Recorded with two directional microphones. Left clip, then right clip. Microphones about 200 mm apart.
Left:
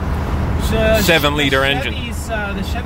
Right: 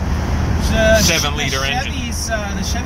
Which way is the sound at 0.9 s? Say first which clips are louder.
Left 2 dB; 40° left (ahead or behind).